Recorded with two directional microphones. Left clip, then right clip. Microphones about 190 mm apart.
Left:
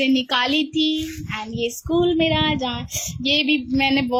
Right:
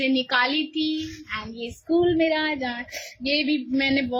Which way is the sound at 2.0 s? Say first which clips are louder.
Left 4 dB; 30° left (ahead or behind).